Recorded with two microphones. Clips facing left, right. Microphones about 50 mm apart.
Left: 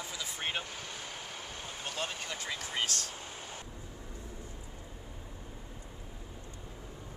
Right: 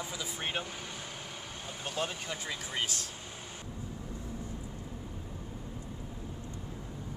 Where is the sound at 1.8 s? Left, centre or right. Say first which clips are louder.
Right 3 dB; centre.